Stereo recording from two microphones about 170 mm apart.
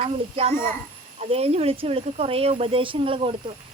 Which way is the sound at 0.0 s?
35° right (ahead or behind).